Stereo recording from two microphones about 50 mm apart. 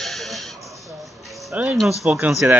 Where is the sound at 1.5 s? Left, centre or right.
Right.